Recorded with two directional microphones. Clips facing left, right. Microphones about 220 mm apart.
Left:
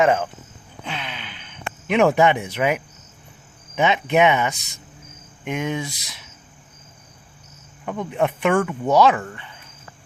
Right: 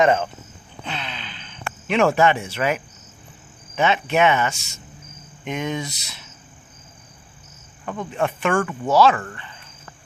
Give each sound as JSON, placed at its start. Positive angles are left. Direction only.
{"t": 0.0, "sound": "speech", "side_deg": 5}
{"t": 0.9, "sound": "a sound", "side_deg": 10}
{"t": 3.8, "sound": "speech", "side_deg": 15}
{"t": 7.9, "sound": "speech", "side_deg": 15}
{"t": 8.5, "sound": "speech", "side_deg": 5}
{"t": 8.9, "sound": "speech", "side_deg": 15}
{"t": 9.3, "sound": "cricket", "side_deg": 10}